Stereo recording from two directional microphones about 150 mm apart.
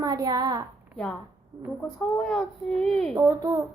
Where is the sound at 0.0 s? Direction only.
25° right (ahead or behind).